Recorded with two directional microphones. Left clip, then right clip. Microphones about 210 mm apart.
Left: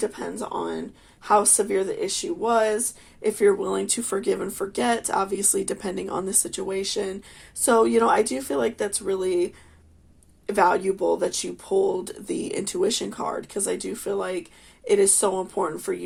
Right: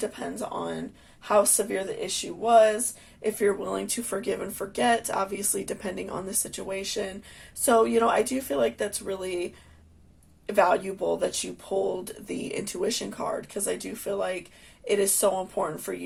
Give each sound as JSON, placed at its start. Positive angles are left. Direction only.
{"t": 0.0, "sound": "speech", "side_deg": 35}